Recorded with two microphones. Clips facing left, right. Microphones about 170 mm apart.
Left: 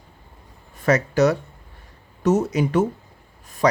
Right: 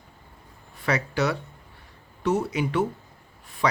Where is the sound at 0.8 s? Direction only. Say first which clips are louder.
Left 7 dB; 45° left (ahead or behind).